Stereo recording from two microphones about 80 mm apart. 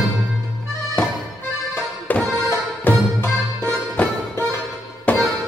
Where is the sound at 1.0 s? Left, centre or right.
Centre.